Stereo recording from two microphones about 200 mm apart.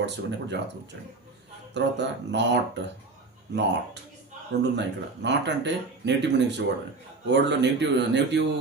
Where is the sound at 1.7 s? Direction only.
60° right (ahead or behind).